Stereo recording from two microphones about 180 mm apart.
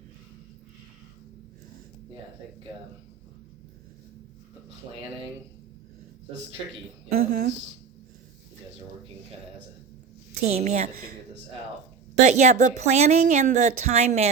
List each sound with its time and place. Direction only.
7.1 s speech: 60° right (ahead or behind)
10.4 s speech: 40° right (ahead or behind)
12.2 s speech: 40° right (ahead or behind)